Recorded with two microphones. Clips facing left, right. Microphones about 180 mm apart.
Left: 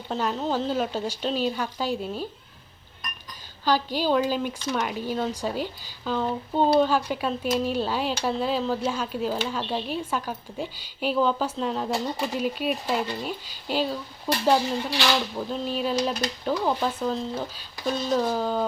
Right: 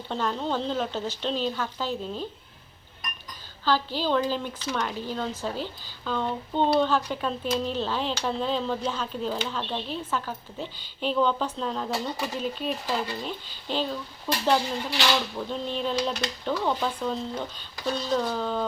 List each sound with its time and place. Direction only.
0.1 s speech: 5° left (ahead or behind)
3.6 s speech: 15° left (ahead or behind)
11.9 s speech: 25° left (ahead or behind)
12.3 s speech: 10° left (ahead or behind)
15.4 s speech: 5° left (ahead or behind)